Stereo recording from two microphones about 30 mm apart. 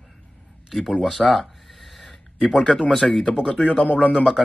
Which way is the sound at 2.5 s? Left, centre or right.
Left.